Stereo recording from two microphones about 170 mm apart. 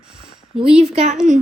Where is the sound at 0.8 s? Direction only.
40° right (ahead or behind).